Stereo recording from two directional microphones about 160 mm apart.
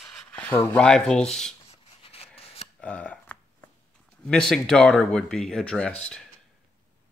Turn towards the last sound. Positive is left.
turn(degrees=5)  # may be behind; listen again after turning